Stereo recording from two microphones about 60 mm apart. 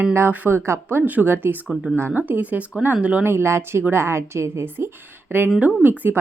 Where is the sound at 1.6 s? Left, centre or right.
Centre.